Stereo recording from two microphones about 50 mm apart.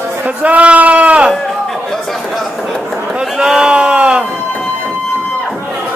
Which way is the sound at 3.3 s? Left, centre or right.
Centre.